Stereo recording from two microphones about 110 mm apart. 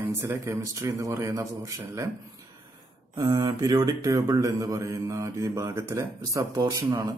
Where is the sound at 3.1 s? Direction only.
35° right (ahead or behind).